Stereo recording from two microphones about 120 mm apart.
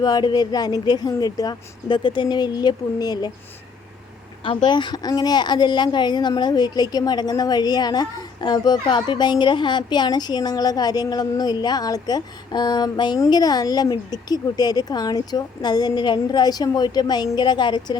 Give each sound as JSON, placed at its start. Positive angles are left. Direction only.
{"t": 0.0, "sound": "speech", "side_deg": 35}
{"t": 4.4, "sound": "speech", "side_deg": 40}